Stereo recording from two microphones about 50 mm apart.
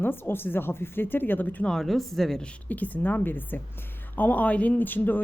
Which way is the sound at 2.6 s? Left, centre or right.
Left.